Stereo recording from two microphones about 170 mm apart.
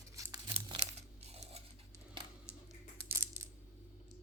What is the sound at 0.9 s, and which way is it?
Coin, 35° right (ahead or behind).